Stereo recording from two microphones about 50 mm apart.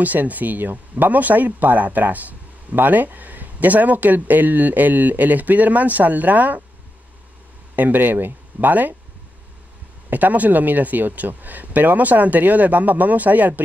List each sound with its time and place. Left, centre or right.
0.0 s speech: right
7.7 s speech: right
10.0 s speech: right